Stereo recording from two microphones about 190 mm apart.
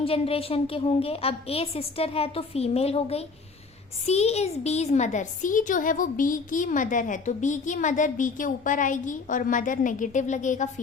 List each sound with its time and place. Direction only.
0.0 s a woman's voice: 30° left (ahead or behind)